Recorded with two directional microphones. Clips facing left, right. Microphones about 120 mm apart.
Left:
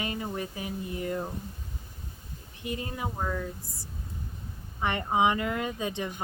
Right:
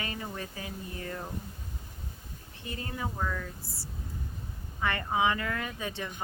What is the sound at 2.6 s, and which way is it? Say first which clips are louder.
Speech: left 3 dB; 20° left (ahead or behind).